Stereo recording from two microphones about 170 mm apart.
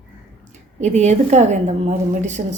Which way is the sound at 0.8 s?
45° right (ahead or behind).